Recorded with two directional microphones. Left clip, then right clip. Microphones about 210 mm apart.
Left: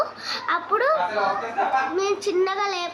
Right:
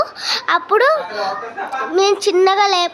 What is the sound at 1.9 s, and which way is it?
Speech, 50° right (ahead or behind).